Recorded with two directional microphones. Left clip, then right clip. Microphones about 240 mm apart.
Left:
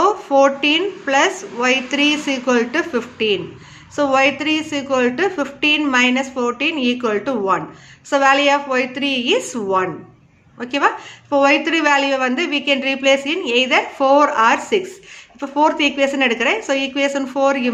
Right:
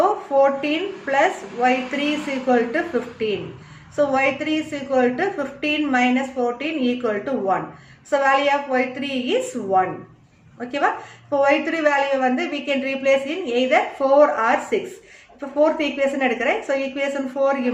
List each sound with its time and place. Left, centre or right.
0.3 s a woman's voice: left